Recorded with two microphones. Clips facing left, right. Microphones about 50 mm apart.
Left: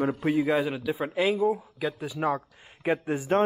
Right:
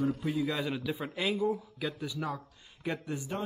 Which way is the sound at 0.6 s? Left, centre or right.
Centre.